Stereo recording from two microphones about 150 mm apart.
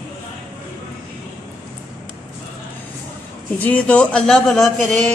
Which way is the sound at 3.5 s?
10° left (ahead or behind).